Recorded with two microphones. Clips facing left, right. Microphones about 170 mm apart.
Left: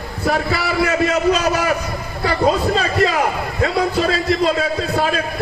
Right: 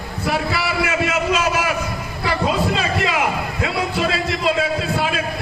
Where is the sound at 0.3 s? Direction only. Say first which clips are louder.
Left 3 dB; 40° left (ahead or behind).